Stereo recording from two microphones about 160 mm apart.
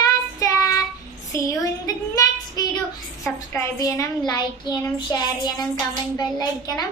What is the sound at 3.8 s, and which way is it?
Speech, 20° left (ahead or behind).